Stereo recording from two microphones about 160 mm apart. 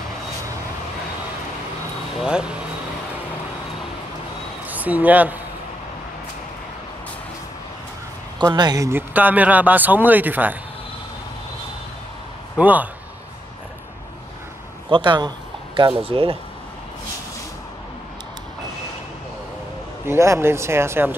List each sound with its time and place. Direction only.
2.1 s speech: 5° right (ahead or behind)
4.6 s speech: 10° right (ahead or behind)
8.5 s speech: 25° right (ahead or behind)
12.5 s speech: 10° right (ahead or behind)
14.9 s a sound: 30° right (ahead or behind)
16.0 s speech: 35° right (ahead or behind)
20.1 s speech: 15° right (ahead or behind)